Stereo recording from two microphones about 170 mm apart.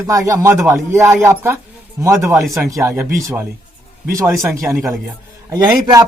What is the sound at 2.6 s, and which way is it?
A man's voice, 15° right (ahead or behind).